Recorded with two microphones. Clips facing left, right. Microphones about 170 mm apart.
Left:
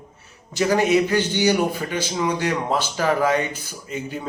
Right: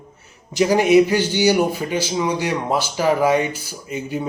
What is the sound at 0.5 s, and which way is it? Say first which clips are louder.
A man's voice: right 4 dB; 15° right (ahead or behind).